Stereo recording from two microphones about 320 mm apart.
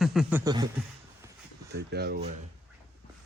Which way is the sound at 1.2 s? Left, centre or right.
Centre.